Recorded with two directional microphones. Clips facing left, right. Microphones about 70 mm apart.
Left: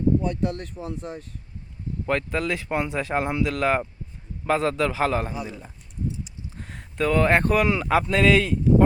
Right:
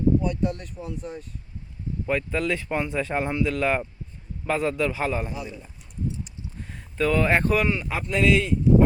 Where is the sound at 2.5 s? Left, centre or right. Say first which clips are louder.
Even; left.